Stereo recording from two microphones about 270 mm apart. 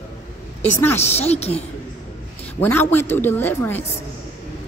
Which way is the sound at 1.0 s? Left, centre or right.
Left.